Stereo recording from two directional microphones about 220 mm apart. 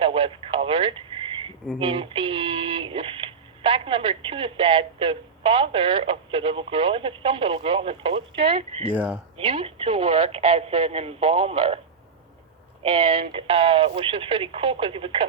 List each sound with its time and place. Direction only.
0.0 s speech: 25° right (ahead or behind)
9.0 s speech: 10° right (ahead or behind)
9.4 s speech: 25° right (ahead or behind)
12.8 s speech: 25° right (ahead or behind)